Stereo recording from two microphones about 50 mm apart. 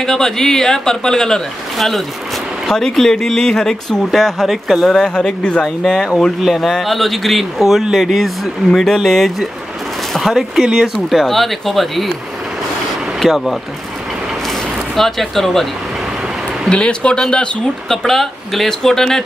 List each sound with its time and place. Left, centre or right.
0.0 s speech: centre
10.3 s speech: centre
11.1 s speech: centre
13.2 s speech: centre
15.0 s speech: centre
16.6 s speech: centre
18.0 s speech: centre